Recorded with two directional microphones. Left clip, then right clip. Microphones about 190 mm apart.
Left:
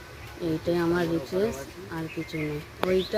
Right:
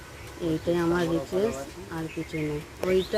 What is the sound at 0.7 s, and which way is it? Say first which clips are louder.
Speech: even; 10° right (ahead or behind).